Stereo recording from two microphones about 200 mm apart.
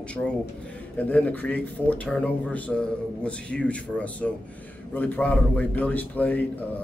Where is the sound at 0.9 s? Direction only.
5° left (ahead or behind).